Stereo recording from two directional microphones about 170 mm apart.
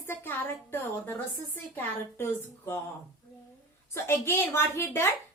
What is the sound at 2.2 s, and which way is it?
Speech, 15° left (ahead or behind).